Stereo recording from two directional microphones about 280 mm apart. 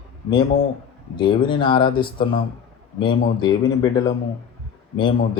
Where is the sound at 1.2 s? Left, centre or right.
Centre.